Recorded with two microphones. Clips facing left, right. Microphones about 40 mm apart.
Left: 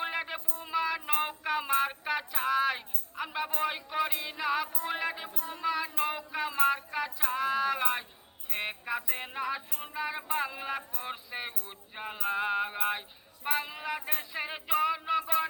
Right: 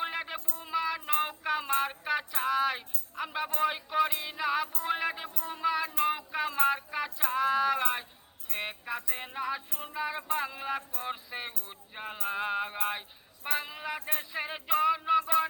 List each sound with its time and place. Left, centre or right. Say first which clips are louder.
0.0 s music: even; centre
5.5 s a sound: right 2 dB; centre
8.4 s music: left 1 dB; centre